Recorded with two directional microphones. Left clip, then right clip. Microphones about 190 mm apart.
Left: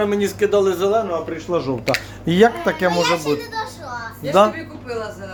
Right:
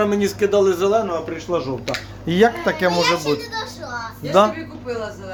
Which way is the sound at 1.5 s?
20° left (ahead or behind).